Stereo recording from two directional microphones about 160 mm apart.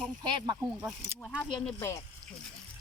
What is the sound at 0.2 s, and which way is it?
Speech, 25° right (ahead or behind).